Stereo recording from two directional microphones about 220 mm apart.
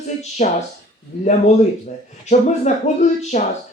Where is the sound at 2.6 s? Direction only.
30° left (ahead or behind).